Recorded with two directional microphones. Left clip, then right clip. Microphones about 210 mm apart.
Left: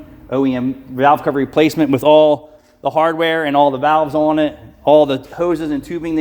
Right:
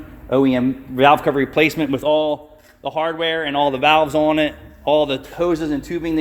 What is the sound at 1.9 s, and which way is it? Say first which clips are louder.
Speech: left 8 dB; 55° left (ahead or behind).